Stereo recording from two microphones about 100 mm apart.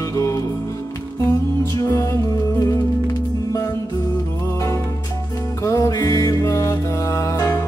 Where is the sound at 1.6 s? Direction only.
30° left (ahead or behind).